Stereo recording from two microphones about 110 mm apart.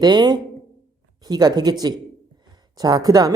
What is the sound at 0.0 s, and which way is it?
Speech, 40° right (ahead or behind).